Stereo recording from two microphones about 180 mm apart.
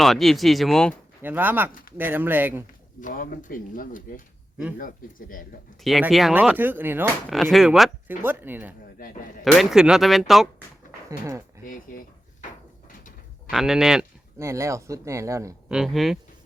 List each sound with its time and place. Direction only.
0.0 s speech: centre (ahead or behind)
1.2 s speech: 10° right (ahead or behind)
3.0 s speech: 45° left (ahead or behind)
5.8 s speech: centre (ahead or behind)
11.6 s speech: 50° left (ahead or behind)
13.5 s speech: centre (ahead or behind)
14.3 s speech: 15° right (ahead or behind)
15.7 s speech: centre (ahead or behind)